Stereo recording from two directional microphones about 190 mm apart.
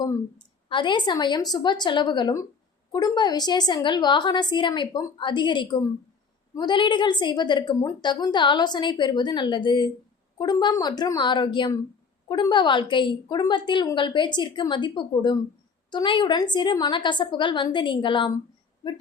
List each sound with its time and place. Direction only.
0.0 s a woman's voice: 25° left (ahead or behind)